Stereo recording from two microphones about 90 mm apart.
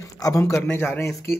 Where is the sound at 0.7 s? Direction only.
20° left (ahead or behind).